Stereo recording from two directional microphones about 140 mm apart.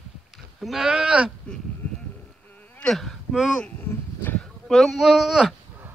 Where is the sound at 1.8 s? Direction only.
10° left (ahead or behind).